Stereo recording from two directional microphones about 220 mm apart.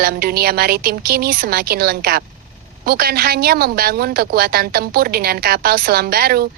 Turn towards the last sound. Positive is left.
turn(degrees=-45)  # may be behind; listen again after turning